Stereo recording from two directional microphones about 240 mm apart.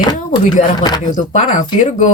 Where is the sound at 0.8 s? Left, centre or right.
Centre.